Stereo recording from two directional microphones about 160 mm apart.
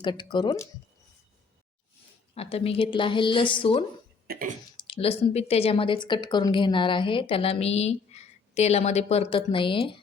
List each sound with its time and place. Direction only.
0.0 s speech: 30° left (ahead or behind)
2.3 s speech: 35° left (ahead or behind)
4.3 s throat clearing: 60° right (ahead or behind)
4.8 s speech: 35° left (ahead or behind)